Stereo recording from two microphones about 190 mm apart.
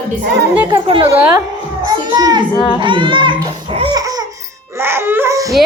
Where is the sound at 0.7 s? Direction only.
25° right (ahead or behind).